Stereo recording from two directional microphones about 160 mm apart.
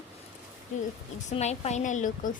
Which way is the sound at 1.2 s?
45° left (ahead or behind).